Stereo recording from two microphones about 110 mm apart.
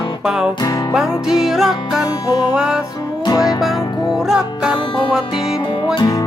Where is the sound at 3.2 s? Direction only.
35° left (ahead or behind).